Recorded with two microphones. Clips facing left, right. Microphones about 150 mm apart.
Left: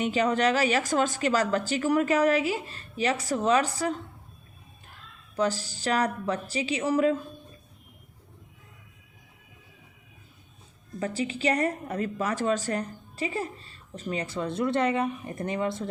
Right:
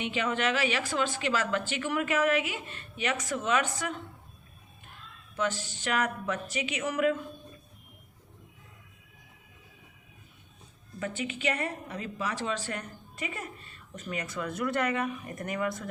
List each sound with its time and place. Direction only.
0.0 s a woman's voice: 40° left (ahead or behind)
5.4 s a woman's voice: 35° left (ahead or behind)
11.0 s a woman's voice: 35° left (ahead or behind)